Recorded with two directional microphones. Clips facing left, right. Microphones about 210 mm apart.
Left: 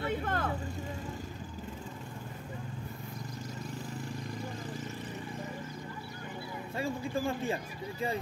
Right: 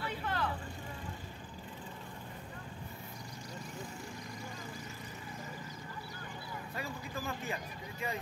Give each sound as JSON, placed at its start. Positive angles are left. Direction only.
{"t": 0.0, "sound": "vehicle", "side_deg": 50}
{"t": 6.8, "sound": "speech", "side_deg": 30}